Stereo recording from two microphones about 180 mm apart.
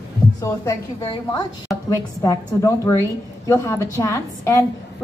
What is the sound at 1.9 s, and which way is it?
A woman's voice, 20° left (ahead or behind).